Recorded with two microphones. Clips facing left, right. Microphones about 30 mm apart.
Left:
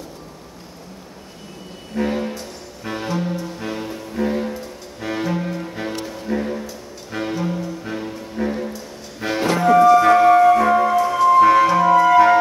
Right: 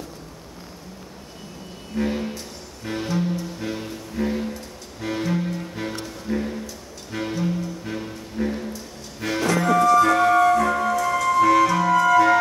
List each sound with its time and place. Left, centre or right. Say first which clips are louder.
2.0 s music: left 3 dB; centre
9.5 s music: left 5 dB; left